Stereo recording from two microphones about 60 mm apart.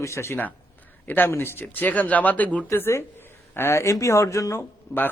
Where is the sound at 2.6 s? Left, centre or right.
Left.